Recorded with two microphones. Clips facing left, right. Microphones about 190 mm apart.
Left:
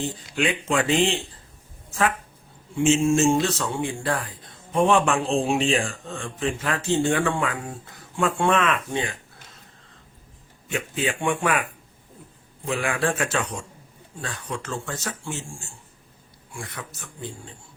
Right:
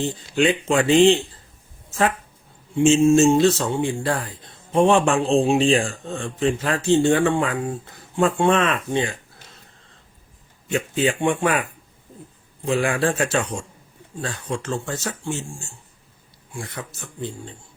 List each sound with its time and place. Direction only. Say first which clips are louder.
0.3 s a man's voice: right 5 dB; 30° right (ahead or behind)
2.7 s a man's voice: right 5 dB; 25° right (ahead or behind)
10.7 s a man's voice: right 5 dB; 30° right (ahead or behind)
12.6 s a man's voice: right 4 dB; 30° right (ahead or behind)